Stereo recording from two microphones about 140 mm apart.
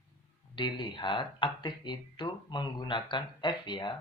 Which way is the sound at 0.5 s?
35° left (ahead or behind).